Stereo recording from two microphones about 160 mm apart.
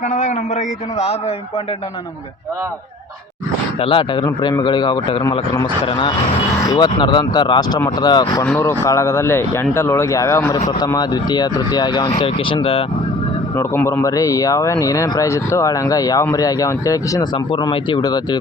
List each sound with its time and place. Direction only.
0.1 s a man's voice: 50° left (ahead or behind)
3.8 s speech: 35° left (ahead or behind)
8.4 s speech: 15° left (ahead or behind); by 12.8 s 35° left (ahead or behind)
13.6 s speech: 15° left (ahead or behind)
17.3 s speech: 30° left (ahead or behind)